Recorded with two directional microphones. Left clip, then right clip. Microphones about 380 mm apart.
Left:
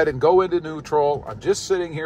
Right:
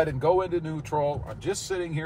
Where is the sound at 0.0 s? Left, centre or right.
Centre.